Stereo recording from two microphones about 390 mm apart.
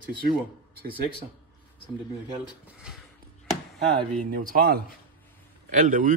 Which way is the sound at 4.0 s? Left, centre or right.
Right.